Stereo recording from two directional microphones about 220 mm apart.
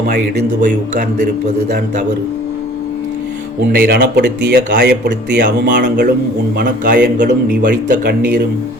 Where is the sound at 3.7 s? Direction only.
45° right (ahead or behind).